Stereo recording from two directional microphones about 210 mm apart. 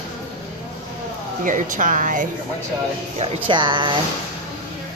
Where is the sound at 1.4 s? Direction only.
40° right (ahead or behind).